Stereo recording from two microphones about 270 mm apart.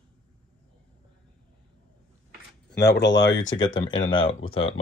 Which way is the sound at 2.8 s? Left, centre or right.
Left.